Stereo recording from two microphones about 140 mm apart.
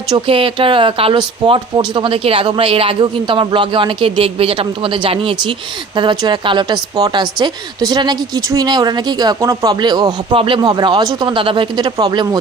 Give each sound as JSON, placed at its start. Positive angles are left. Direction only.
{"t": 0.1, "sound": "speech", "side_deg": -40}